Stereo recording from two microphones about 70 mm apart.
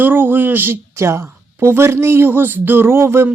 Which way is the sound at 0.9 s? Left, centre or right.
Right.